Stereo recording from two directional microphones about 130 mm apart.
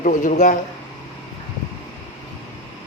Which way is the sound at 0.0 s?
85° left.